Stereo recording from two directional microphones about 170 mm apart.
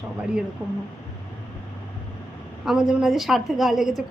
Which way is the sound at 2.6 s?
5° right (ahead or behind).